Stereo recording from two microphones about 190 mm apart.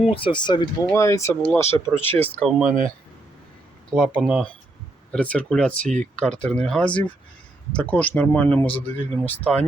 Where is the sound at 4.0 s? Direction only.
Centre (ahead or behind).